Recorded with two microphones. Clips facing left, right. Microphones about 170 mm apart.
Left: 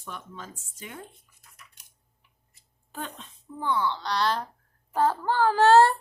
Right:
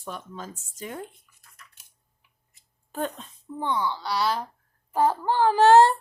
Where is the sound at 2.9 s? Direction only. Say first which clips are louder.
Right 7 dB; 45° right (ahead or behind).